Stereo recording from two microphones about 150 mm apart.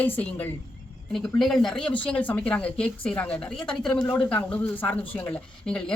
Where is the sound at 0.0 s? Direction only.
10° left (ahead or behind).